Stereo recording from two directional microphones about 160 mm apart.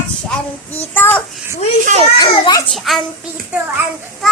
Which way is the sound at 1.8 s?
45° right (ahead or behind).